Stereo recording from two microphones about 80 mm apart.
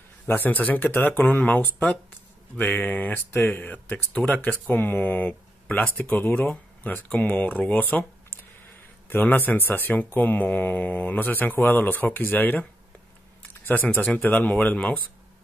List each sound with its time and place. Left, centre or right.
0.3 s speech: left
9.1 s speech: left
13.7 s speech: left